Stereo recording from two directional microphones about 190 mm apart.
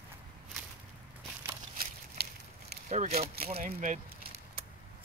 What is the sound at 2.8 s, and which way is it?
Speech, 35° right (ahead or behind).